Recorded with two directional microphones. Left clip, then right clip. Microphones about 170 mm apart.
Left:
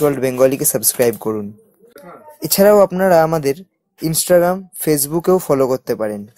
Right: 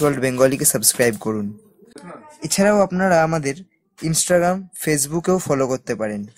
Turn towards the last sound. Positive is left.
turn(degrees=15)  # may be behind; listen again after turning